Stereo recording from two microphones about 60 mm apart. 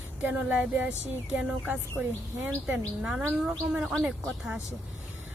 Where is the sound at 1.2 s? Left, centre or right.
Right.